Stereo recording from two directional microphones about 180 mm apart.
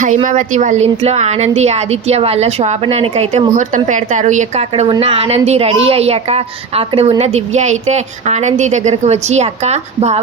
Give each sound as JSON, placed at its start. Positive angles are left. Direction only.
{"t": 0.3, "sound": "a woman's voice", "side_deg": -45}